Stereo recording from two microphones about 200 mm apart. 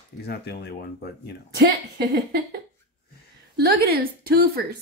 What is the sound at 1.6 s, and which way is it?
A woman's voice, 55° right (ahead or behind).